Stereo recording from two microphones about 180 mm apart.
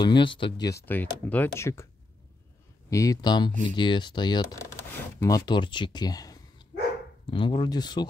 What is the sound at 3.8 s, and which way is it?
Speech, 25° left (ahead or behind).